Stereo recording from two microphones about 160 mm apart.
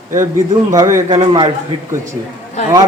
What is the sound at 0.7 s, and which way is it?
Speech, 20° right (ahead or behind).